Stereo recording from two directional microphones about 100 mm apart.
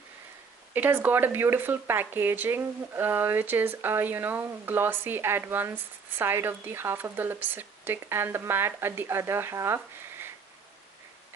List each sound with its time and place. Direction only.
0.7 s speech: 20° right (ahead or behind)